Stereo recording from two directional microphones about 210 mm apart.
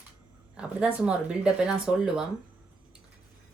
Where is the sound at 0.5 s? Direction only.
5° right (ahead or behind).